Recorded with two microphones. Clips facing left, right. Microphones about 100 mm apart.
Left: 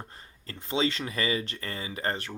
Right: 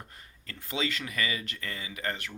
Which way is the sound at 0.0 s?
30° left (ahead or behind).